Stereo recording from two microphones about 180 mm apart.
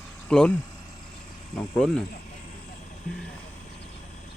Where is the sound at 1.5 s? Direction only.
5° left (ahead or behind).